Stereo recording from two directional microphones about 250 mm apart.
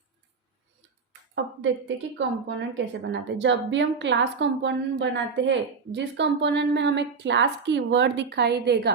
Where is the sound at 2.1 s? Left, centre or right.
Right.